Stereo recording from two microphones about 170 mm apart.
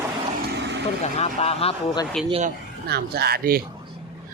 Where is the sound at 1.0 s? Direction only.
40° left (ahead or behind).